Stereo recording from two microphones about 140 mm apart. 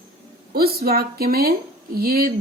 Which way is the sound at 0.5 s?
90° right.